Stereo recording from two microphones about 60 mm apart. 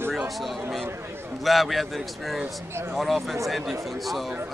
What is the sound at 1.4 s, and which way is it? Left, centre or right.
Speech, centre.